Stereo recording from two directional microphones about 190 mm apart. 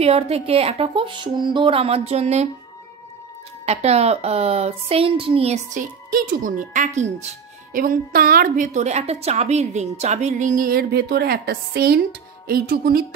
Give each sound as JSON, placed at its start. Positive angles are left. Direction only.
{"t": 0.0, "sound": "speech", "side_deg": -30}
{"t": 3.6, "sound": "a woman's voice", "side_deg": -35}